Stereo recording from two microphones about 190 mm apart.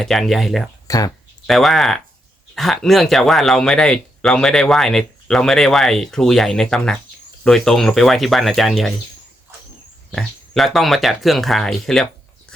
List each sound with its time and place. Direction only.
0.0 s speech: centre (ahead or behind)
0.9 s speech: 20° left (ahead or behind)
1.5 s speech: centre (ahead or behind)
10.1 s speech: centre (ahead or behind)